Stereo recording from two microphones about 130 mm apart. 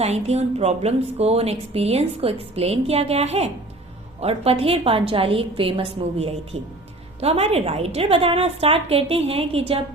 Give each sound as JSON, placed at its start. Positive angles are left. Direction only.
{"t": 0.0, "sound": "a woman's voice", "side_deg": -55}